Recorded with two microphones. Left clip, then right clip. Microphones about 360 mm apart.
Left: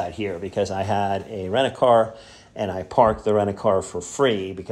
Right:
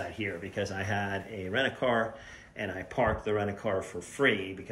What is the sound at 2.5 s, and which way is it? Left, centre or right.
Speech, left.